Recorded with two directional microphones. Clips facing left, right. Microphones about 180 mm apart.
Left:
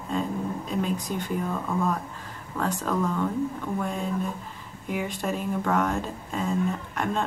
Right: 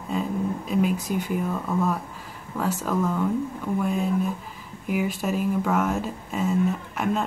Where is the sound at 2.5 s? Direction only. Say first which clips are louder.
Right 2 dB; 5° right (ahead or behind).